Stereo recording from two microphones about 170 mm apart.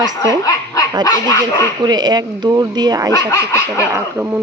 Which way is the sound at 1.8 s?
25° right (ahead or behind).